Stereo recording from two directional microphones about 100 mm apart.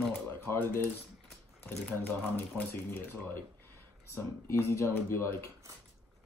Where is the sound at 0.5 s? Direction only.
20° left (ahead or behind).